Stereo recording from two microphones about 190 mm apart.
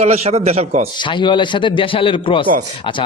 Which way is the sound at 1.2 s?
25° left (ahead or behind).